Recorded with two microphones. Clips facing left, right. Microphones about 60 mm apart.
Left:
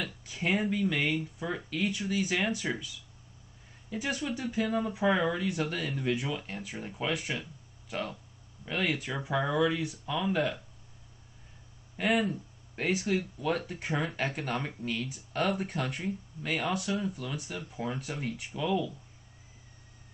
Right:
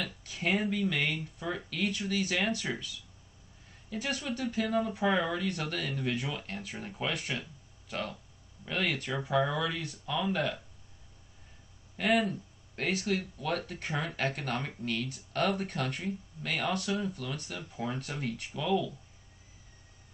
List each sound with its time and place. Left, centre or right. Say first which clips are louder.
0.0 s speech: left 1 dB; centre
3.9 s speech: left 2 dB; centre
12.0 s speech: even; centre